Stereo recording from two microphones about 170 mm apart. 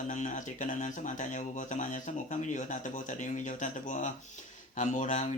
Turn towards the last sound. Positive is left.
turn(degrees=45)  # may be behind; listen again after turning